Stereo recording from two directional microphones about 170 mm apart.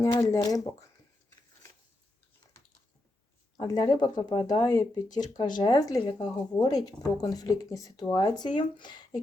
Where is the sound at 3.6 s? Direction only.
25° left (ahead or behind).